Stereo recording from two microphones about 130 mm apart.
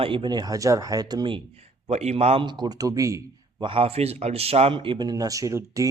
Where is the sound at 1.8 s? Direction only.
55° right (ahead or behind).